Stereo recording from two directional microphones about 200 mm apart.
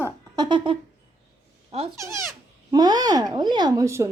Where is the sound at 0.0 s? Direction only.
20° right (ahead or behind).